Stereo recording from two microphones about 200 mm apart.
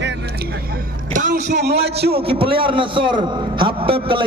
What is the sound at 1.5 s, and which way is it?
Speech, 55° right (ahead or behind).